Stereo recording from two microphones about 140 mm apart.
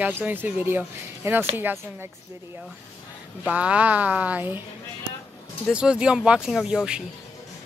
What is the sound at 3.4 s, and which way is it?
Speech, 10° right (ahead or behind).